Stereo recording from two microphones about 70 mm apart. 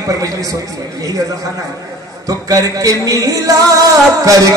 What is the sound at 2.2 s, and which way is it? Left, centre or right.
A man's voice, right.